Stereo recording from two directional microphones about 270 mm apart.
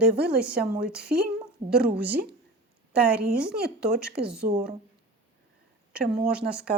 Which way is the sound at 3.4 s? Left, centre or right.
Centre.